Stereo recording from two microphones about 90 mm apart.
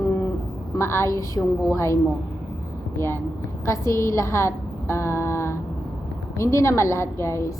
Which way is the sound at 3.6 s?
35° left (ahead or behind).